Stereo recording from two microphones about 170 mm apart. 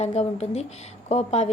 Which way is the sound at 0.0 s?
40° left (ahead or behind).